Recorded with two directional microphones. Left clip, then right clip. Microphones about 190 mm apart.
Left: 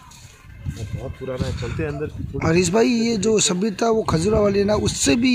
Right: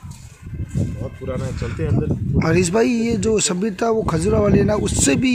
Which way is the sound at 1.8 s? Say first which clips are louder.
Even; 20° left (ahead or behind).